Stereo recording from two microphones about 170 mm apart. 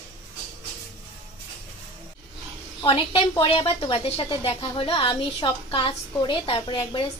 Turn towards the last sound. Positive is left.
turn(degrees=30)  # may be behind; listen again after turning